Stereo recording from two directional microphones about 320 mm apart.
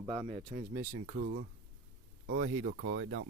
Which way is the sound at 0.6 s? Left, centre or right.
Right.